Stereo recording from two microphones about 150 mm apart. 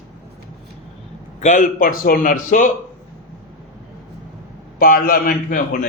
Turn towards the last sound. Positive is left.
turn(degrees=75)  # may be behind; listen again after turning